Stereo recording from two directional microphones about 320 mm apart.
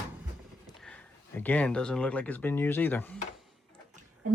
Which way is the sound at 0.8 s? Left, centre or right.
Centre.